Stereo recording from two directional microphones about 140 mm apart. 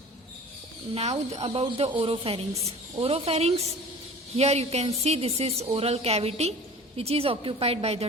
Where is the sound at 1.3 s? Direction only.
45° right (ahead or behind).